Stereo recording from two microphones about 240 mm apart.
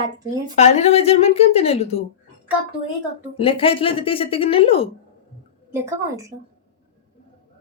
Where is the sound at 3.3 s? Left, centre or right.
Left.